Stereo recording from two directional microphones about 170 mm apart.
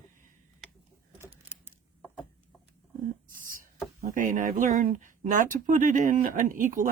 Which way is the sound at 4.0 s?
45° right (ahead or behind).